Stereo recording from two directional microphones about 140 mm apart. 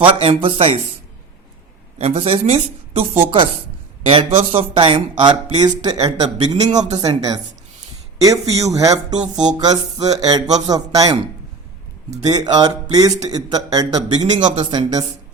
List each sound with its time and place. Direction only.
0.2 s speech: 40° right (ahead or behind)
2.0 s speech: 45° right (ahead or behind); by 11.2 s 25° right (ahead or behind)
12.2 s speech: 30° right (ahead or behind)